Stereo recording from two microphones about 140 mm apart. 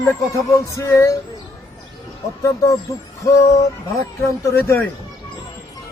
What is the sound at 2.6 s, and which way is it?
Speech, 25° left (ahead or behind).